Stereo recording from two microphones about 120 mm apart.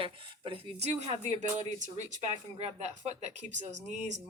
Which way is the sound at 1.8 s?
90° right.